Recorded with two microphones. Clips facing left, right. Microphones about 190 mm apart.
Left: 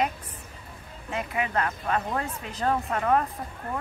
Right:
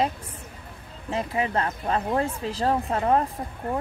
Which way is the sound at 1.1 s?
30° right (ahead or behind).